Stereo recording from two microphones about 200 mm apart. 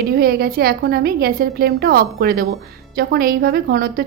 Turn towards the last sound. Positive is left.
turn(degrees=-45)  # may be behind; listen again after turning